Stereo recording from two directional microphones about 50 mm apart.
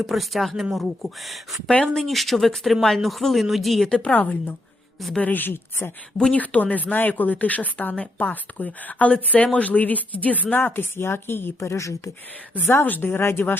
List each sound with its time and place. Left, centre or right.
0.1 s speech: centre
4.0 s speech: left
6.3 s speech: left
10.6 s speech: left
12.6 s speech: left